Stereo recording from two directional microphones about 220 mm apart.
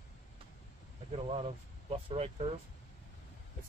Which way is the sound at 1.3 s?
25° right (ahead or behind).